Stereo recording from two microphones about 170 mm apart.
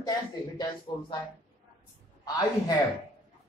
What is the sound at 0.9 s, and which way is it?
Speech, 30° left (ahead or behind).